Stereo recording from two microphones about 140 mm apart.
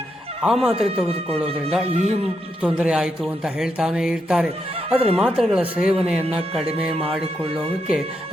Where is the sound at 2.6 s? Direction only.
5° right (ahead or behind).